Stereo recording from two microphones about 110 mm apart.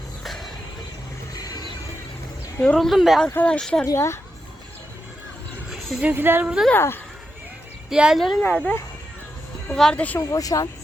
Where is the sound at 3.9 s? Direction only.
25° left (ahead or behind).